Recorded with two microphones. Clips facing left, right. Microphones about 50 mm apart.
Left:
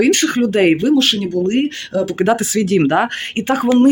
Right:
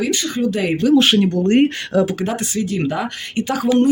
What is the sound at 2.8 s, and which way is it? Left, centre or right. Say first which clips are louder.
Speech: left 7 dB; left.